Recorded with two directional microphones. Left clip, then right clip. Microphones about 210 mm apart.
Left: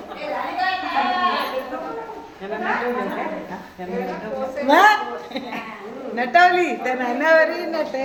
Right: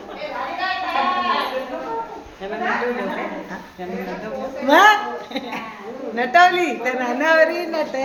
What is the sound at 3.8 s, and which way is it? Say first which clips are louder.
A woman's voice: left 2 dB; 15° right (ahead or behind).